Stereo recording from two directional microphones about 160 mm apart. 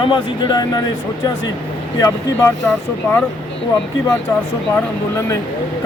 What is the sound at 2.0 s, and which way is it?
Speech, 20° left (ahead or behind).